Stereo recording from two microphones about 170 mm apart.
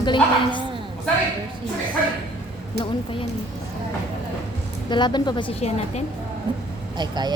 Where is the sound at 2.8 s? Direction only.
30° left (ahead or behind).